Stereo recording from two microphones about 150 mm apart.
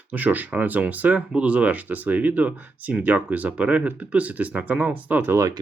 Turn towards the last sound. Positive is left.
turn(degrees=-15)  # may be behind; listen again after turning